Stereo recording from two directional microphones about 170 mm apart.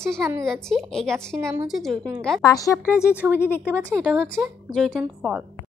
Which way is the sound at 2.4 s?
20° left (ahead or behind).